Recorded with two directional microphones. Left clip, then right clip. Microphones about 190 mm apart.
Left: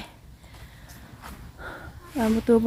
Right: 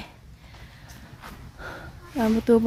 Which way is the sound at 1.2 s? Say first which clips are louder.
Right 1 dB; 5° left (ahead or behind).